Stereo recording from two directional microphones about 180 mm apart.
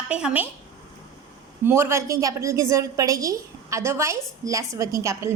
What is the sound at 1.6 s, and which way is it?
A woman's voice, 15° right (ahead or behind).